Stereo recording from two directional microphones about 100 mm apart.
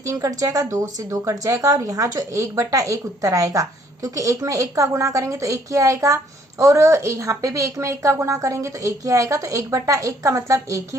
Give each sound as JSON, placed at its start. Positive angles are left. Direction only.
{"t": 0.0, "sound": "speech", "side_deg": -35}